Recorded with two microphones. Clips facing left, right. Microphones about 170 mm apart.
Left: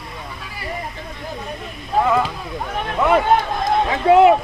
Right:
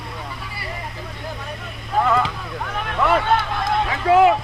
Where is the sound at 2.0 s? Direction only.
10° left (ahead or behind).